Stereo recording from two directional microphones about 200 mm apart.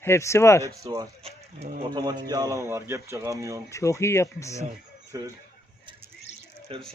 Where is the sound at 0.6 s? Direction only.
15° right (ahead or behind).